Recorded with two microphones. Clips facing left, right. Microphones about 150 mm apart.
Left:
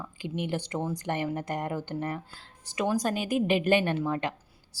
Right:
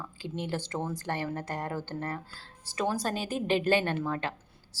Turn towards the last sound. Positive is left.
turn(degrees=15)  # may be behind; listen again after turning